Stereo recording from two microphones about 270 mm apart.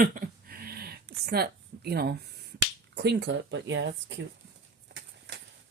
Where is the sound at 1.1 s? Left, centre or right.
Right.